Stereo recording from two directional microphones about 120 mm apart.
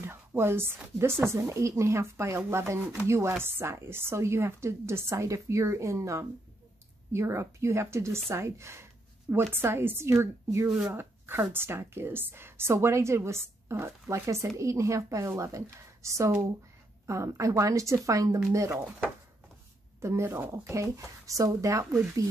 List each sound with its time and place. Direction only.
0.0 s a woman's voice: 20° right (ahead or behind)
20.0 s a woman's voice: 25° right (ahead or behind)